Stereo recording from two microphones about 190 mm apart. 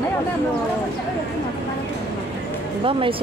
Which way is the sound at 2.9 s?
30° right (ahead or behind).